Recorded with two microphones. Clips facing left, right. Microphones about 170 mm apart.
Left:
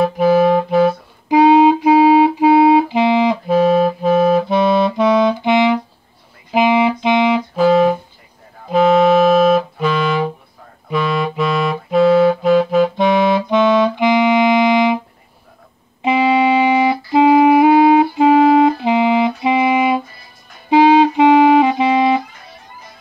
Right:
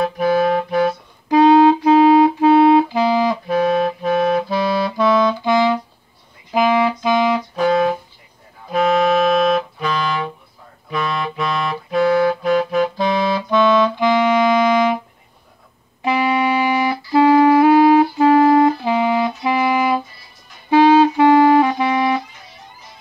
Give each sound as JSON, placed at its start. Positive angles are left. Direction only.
{"t": 0.0, "sound": "music", "side_deg": 25}
{"t": 9.1, "sound": "music", "side_deg": 5}
{"t": 12.1, "sound": "music", "side_deg": 25}
{"t": 12.9, "sound": "clarinet", "side_deg": 20}
{"t": 16.0, "sound": "music", "side_deg": 20}